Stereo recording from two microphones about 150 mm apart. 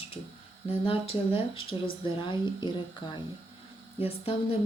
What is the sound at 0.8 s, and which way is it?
Speech, 40° left (ahead or behind).